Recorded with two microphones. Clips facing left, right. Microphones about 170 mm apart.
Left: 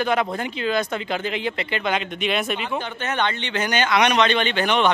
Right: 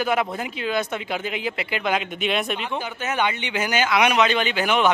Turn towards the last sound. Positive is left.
turn(degrees=-5)  # may be behind; listen again after turning